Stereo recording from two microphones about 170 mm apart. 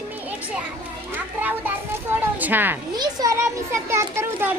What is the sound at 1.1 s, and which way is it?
A child's voice, 10° right (ahead or behind).